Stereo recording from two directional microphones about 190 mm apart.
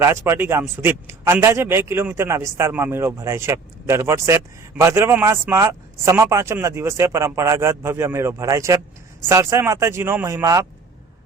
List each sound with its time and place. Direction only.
0.0 s a man's voice: 15° right (ahead or behind)